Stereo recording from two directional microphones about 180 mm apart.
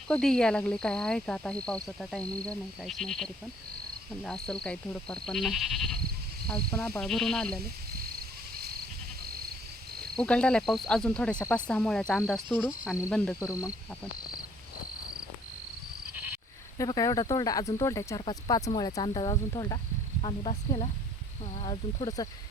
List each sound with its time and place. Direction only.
0.1 s speech: 5° left (ahead or behind)
10.2 s speech: 5° left (ahead or behind)
13.4 s speech: 20° left (ahead or behind)
16.7 s speech: 20° left (ahead or behind)
20.2 s speech: 35° left (ahead or behind)
22.0 s speech: 20° left (ahead or behind)